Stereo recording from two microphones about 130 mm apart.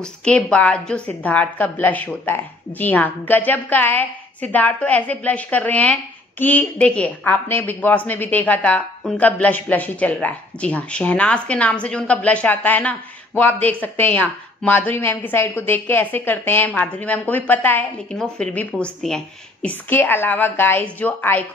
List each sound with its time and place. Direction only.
0.0 s a woman's voice: 10° left (ahead or behind)